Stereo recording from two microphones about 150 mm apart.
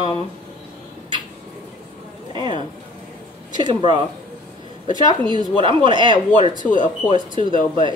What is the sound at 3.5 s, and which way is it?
Speech, 30° right (ahead or behind).